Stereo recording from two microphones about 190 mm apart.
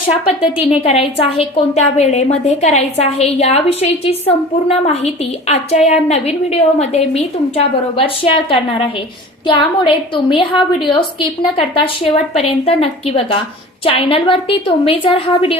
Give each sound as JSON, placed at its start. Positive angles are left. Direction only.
{"t": 0.1, "sound": "a woman's voice", "side_deg": 30}